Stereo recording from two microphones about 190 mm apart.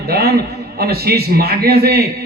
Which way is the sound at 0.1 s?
55° right (ahead or behind).